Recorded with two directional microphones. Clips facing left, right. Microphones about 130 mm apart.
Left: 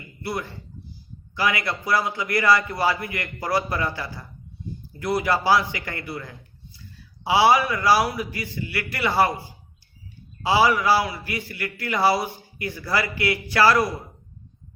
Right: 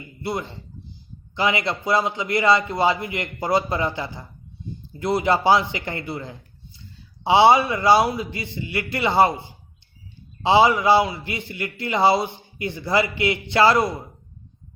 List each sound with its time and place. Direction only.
0.2 s a man's voice: 20° right (ahead or behind)